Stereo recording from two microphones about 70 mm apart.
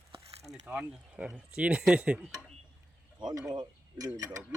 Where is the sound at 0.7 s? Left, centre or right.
Centre.